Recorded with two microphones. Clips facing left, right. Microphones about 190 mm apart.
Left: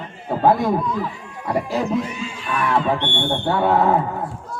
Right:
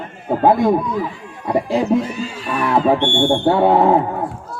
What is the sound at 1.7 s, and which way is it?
Speech, 35° right (ahead or behind).